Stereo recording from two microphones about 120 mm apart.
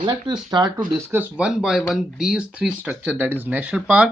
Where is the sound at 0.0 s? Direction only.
35° right (ahead or behind).